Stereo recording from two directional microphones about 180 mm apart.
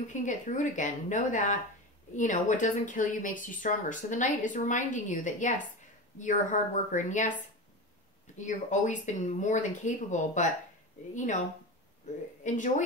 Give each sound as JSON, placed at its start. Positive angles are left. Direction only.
{"t": 0.1, "sound": "speech", "side_deg": 45}
{"t": 8.4, "sound": "speech", "side_deg": 45}
{"t": 12.4, "sound": "speech", "side_deg": 45}